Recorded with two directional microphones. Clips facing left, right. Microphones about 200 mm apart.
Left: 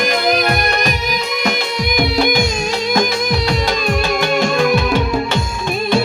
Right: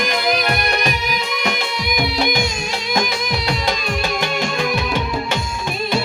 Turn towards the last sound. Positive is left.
turn(degrees=45)  # may be behind; listen again after turning